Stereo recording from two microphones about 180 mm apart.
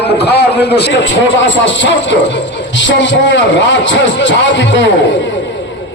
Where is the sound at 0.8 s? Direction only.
85° left.